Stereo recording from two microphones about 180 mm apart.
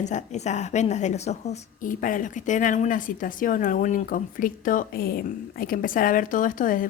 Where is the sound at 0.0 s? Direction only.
40° left (ahead or behind).